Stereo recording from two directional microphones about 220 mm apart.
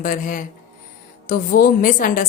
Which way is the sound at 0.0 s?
40° left (ahead or behind).